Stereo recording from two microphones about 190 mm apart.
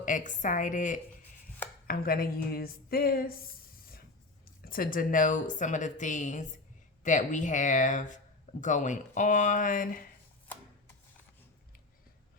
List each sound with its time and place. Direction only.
0.0 s a woman's voice: 45° left (ahead or behind)
4.6 s a woman's voice: 50° left (ahead or behind)